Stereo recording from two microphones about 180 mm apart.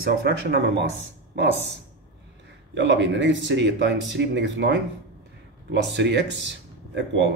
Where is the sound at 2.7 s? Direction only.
85° right.